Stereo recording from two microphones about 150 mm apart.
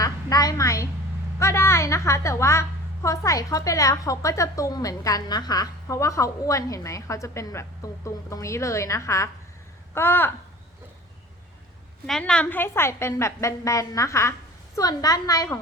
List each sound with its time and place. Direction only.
0.0 s a sound: 25° left (ahead or behind)
1.4 s a woman's voice: 20° left (ahead or behind)
12.0 s a woman's voice: 5° left (ahead or behind); by 15.5 s 25° left (ahead or behind)